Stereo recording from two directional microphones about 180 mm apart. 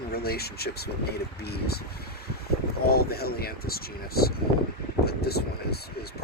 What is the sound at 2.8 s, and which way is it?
Speech, 60° left (ahead or behind).